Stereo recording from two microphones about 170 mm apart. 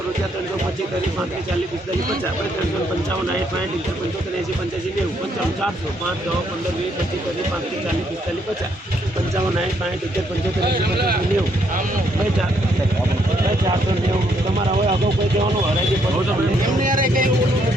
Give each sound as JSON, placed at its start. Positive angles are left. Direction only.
{"t": 10.6, "sound": "speech", "side_deg": -70}
{"t": 16.8, "sound": "speech", "side_deg": -55}